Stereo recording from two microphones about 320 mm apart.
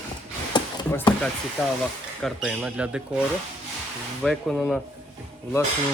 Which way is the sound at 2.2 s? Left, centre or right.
Centre.